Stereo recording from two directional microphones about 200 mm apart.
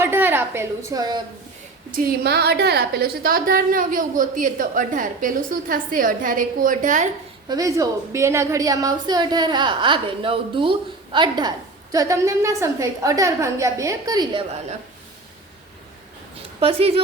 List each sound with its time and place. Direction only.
0.0 s a woman's voice: 10° right (ahead or behind)
1.9 s a woman's voice: 45° right (ahead or behind)
7.4 s a woman's voice: 20° right (ahead or behind)
16.6 s speech: 30° right (ahead or behind)